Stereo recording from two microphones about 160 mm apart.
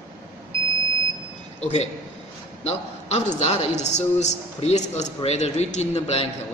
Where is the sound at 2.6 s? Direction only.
45° left (ahead or behind).